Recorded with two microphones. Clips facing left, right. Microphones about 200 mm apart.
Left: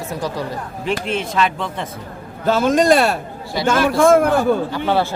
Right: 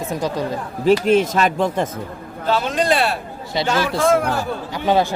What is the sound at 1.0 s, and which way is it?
Speech, 40° right (ahead or behind).